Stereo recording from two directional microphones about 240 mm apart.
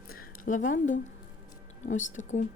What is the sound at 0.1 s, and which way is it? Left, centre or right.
A woman's voice, left.